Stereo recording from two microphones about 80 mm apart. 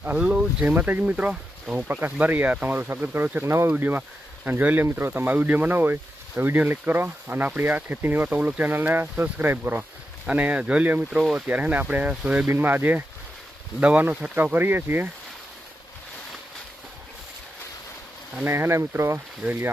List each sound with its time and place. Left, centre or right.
0.0 s speech: centre
18.4 s speech: right
19.4 s speech: right